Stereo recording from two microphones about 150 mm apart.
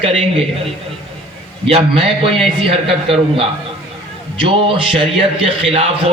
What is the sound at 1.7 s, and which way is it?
A man's voice, 40° right (ahead or behind).